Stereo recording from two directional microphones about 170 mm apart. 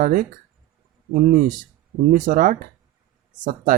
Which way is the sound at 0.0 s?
50° right (ahead or behind).